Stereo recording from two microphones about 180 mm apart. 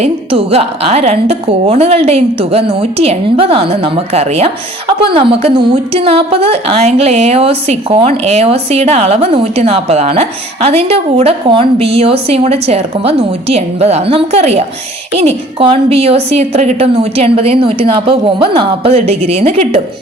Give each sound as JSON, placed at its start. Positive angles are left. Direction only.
{"t": 0.0, "sound": "a woman's voice", "side_deg": -35}